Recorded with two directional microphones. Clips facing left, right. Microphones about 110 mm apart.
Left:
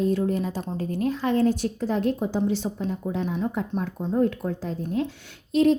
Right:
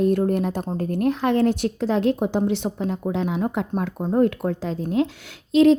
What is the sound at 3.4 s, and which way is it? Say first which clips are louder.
A woman's voice: right 3 dB; 55° right (ahead or behind).